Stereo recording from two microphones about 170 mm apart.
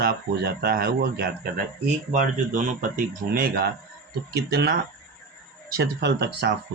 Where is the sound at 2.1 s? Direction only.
45° right (ahead or behind).